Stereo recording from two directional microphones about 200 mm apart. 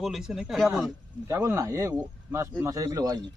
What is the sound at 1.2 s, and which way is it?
Speech, 15° right (ahead or behind).